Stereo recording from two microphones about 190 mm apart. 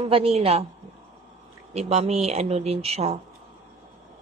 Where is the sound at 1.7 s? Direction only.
35° right (ahead or behind).